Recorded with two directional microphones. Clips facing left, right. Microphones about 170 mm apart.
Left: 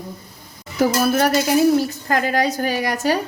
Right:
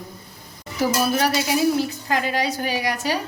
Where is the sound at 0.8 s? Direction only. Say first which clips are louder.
Left 4 dB; 50° left (ahead or behind).